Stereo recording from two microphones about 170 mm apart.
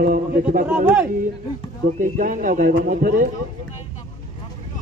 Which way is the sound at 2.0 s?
50° right (ahead or behind).